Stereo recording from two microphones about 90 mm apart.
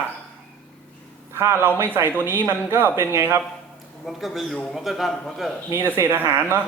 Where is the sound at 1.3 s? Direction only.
30° right (ahead or behind).